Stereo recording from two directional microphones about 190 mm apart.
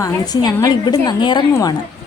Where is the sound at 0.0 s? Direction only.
20° left (ahead or behind).